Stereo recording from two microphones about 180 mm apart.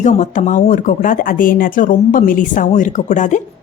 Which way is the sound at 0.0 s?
40° left (ahead or behind).